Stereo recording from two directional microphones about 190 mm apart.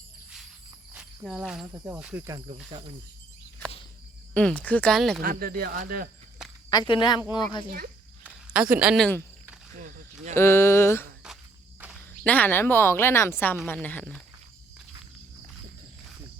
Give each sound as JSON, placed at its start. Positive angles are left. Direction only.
{"t": 0.9, "sound": "insect", "side_deg": -5}
{"t": 1.6, "sound": "speech", "side_deg": -15}
{"t": 2.0, "sound": "speech", "side_deg": -5}
{"t": 2.6, "sound": "speech", "side_deg": -25}
{"t": 4.4, "sound": "speech", "side_deg": 5}
{"t": 5.2, "sound": "speech", "side_deg": -50}
{"t": 6.7, "sound": "speech", "side_deg": 20}
{"t": 8.2, "sound": "a sound", "side_deg": -5}
{"t": 9.7, "sound": "speech", "side_deg": -45}
{"t": 10.3, "sound": "speech", "side_deg": 15}
{"t": 12.2, "sound": "speech", "side_deg": 10}